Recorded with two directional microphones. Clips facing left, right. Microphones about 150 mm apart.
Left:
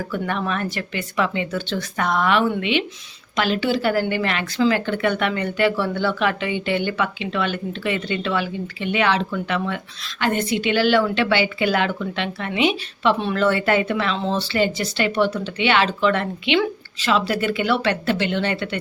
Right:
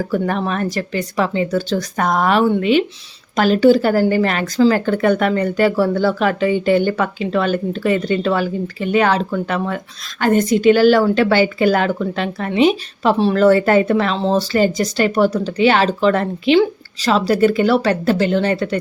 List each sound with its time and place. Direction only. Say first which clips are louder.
0.1 s speech: right 3 dB; 40° right (ahead or behind)